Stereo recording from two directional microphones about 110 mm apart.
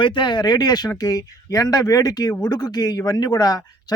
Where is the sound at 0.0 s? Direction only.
45° left (ahead or behind).